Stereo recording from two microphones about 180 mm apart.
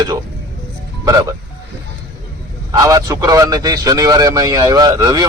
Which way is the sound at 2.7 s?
20° right (ahead or behind).